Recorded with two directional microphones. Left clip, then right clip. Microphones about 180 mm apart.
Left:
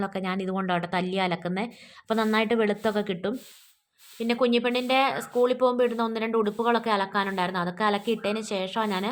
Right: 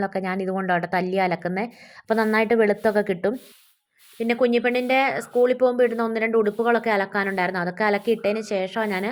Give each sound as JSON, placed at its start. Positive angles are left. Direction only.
{"t": 0.0, "sound": "speech", "side_deg": -15}